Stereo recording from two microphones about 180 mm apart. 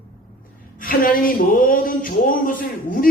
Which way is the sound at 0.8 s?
50° left (ahead or behind).